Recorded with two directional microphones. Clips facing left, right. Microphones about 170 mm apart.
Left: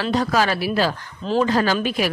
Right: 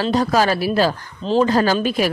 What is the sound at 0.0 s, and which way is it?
Speech, 35° right (ahead or behind).